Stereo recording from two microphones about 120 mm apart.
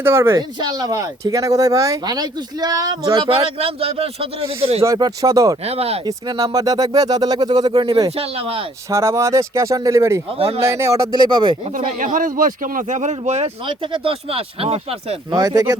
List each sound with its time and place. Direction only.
0.0 s speech: 20° right (ahead or behind)
0.6 s speech: 35° right (ahead or behind)
3.2 s speech: 50° right (ahead or behind)
4.8 s speech: 25° right (ahead or behind)
5.6 s speech: 55° right (ahead or behind)
6.1 s speech: 30° right (ahead or behind)
8.1 s speech: 55° right (ahead or behind)
8.9 s speech: 25° right (ahead or behind)
10.2 s speech: 55° right (ahead or behind)
10.6 s speech: 25° right (ahead or behind)
11.1 s speech: 40° right (ahead or behind)
12.1 s a man's voice: 90° right; by 13.5 s 70° right (ahead or behind)
13.7 s speech: 45° right (ahead or behind)
15.3 s speech: 30° right (ahead or behind)